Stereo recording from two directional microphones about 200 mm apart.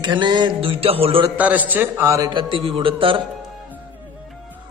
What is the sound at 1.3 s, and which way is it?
A man's voice, 10° right (ahead or behind).